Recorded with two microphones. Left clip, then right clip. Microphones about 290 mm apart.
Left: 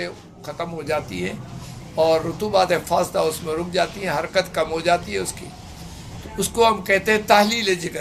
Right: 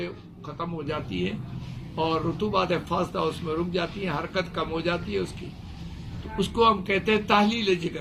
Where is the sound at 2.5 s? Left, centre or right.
Centre.